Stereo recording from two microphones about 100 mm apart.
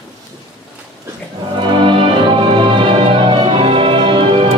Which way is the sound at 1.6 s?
55° right (ahead or behind).